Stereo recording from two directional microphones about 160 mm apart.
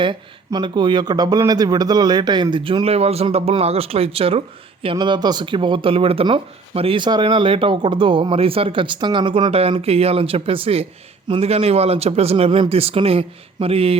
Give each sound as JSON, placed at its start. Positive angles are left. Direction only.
{"t": 0.0, "sound": "speech", "side_deg": -30}